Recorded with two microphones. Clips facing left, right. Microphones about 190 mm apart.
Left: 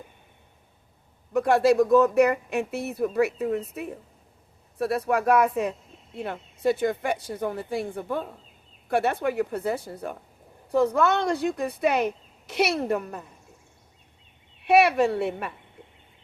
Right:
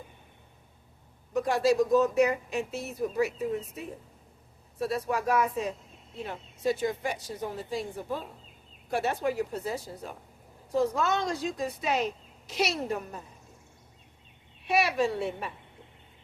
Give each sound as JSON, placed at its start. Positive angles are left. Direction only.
{"t": 1.3, "sound": "speech", "side_deg": 60}
{"t": 14.6, "sound": "speech", "side_deg": 60}